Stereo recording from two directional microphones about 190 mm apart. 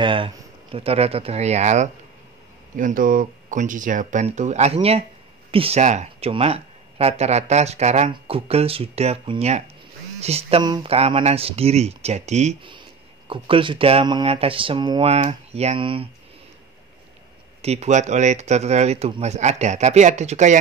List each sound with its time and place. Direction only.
0.0 s speech: 25° right (ahead or behind)
17.6 s speech: 35° right (ahead or behind)